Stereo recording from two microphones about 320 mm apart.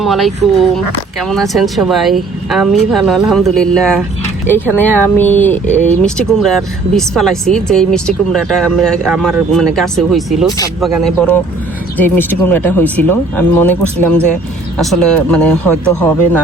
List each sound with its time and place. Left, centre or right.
0.0 s speech: centre